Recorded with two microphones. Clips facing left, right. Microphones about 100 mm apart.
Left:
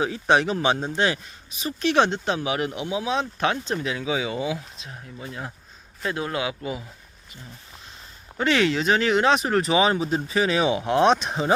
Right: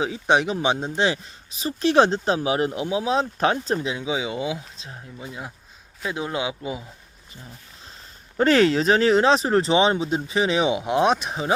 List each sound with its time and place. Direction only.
0.0 s speech: 20° right (ahead or behind)
8.4 s speech: 40° right (ahead or behind); by 11.5 s 5° right (ahead or behind)